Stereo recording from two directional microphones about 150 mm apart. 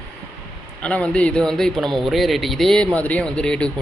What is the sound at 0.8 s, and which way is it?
Speech, 10° left (ahead or behind).